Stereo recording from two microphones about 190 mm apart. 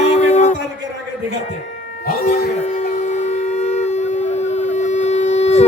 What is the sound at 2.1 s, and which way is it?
Speech, 50° left (ahead or behind).